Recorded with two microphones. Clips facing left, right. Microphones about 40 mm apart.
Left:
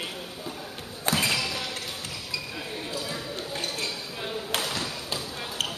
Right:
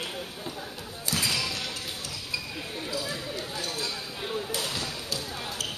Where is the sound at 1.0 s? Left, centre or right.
Left.